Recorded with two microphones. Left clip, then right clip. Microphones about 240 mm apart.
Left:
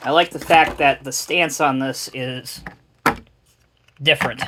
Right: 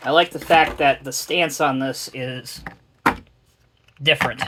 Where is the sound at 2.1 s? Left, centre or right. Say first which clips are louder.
Left 2 dB; left.